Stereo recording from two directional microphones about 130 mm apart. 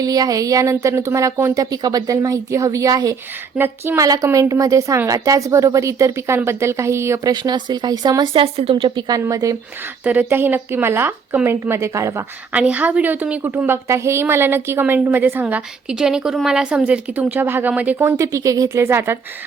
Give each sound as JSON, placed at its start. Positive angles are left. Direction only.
{"t": 0.0, "sound": "a woman's voice", "side_deg": -30}
{"t": 7.3, "sound": "speech", "side_deg": -35}
{"t": 10.0, "sound": "a woman's voice", "side_deg": -15}
{"t": 12.5, "sound": "a woman's voice", "side_deg": -10}